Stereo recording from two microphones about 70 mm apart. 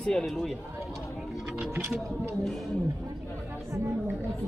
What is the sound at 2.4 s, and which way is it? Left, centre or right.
Speech, centre.